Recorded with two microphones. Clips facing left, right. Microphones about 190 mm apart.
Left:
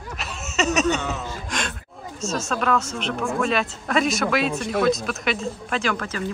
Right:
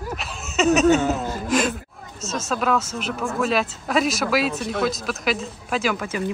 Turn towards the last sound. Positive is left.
turn(degrees=-10)  # may be behind; listen again after turning